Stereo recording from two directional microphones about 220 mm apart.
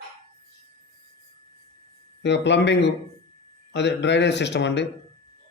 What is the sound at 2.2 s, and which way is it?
Speech, 50° left (ahead or behind).